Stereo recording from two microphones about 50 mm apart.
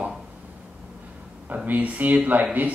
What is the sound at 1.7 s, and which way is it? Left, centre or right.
Speech, right.